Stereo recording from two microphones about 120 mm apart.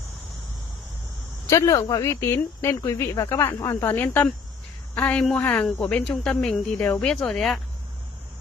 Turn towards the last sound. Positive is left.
turn(degrees=5)  # may be behind; listen again after turning